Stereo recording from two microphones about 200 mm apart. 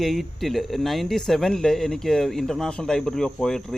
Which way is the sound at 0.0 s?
Centre (ahead or behind).